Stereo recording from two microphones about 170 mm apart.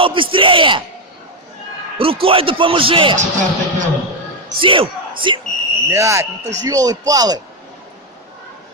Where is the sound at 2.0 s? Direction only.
35° right (ahead or behind).